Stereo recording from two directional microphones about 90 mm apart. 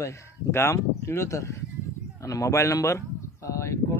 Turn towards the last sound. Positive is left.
turn(degrees=35)  # may be behind; listen again after turning